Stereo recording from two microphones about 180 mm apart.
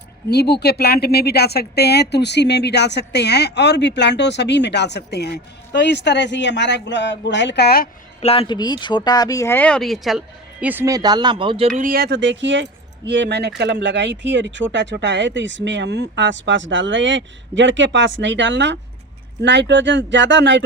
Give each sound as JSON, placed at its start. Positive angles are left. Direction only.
{"t": 0.3, "sound": "speech", "side_deg": 65}
{"t": 8.2, "sound": "speech", "side_deg": 35}
{"t": 11.8, "sound": "speech", "side_deg": -55}
{"t": 13.1, "sound": "speech", "side_deg": -75}